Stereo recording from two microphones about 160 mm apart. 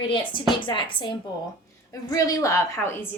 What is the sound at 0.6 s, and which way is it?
A woman's voice, 30° left (ahead or behind).